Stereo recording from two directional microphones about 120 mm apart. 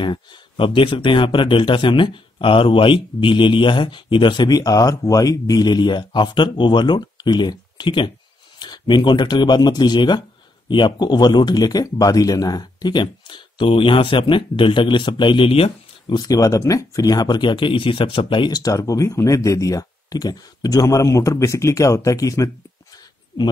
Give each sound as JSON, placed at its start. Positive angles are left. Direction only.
{"t": 0.0, "sound": "speech", "side_deg": 40}
{"t": 16.2, "sound": "speech", "side_deg": 30}